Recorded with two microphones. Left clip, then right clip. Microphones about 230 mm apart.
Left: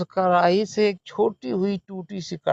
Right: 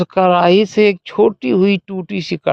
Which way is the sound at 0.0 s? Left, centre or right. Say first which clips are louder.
Right 7 dB; right.